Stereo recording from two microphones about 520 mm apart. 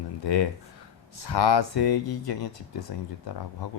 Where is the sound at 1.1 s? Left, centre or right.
Left.